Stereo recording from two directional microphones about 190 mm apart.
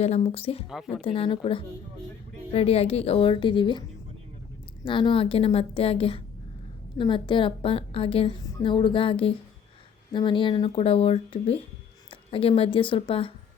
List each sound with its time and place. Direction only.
0.0 s a woman's voice: 35° left (ahead or behind)
4.9 s a woman's voice: 25° left (ahead or behind)